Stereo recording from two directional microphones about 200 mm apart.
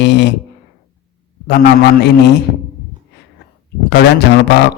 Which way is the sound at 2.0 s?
55° left (ahead or behind).